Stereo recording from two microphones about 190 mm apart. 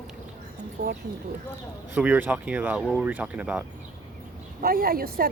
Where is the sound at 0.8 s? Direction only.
55° right (ahead or behind).